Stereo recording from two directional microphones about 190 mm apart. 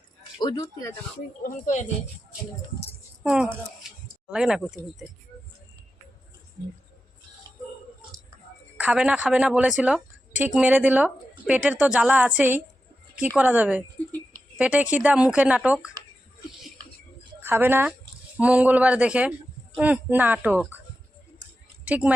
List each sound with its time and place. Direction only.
0.3 s speech: 20° left (ahead or behind)
1.5 s speech: 40° left (ahead or behind)
3.2 s speech: 5° right (ahead or behind)
8.8 s a woman's voice: 5° right (ahead or behind)
17.4 s a woman's voice: 10° right (ahead or behind)
21.8 s speech: 5° right (ahead or behind)